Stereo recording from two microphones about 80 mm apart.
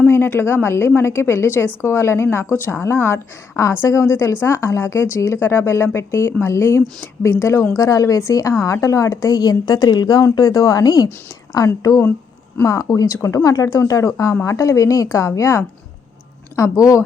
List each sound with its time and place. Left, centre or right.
0.1 s a woman's voice: left
7.8 s a woman's voice: left
10.3 s a woman's voice: left